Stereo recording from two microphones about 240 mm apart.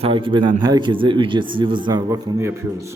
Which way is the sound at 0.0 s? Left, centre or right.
Right.